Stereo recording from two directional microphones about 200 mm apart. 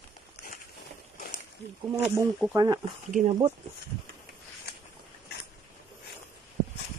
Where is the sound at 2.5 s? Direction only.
20° right (ahead or behind).